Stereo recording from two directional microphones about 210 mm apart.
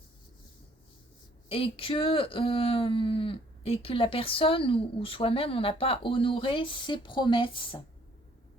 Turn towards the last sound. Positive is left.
turn(degrees=25)  # may be behind; listen again after turning